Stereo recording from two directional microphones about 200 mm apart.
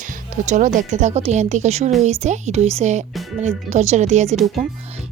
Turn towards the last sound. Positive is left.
turn(degrees=-35)  # may be behind; listen again after turning